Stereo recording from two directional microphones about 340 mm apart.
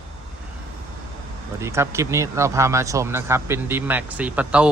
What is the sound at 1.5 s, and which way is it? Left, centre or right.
Speech, centre.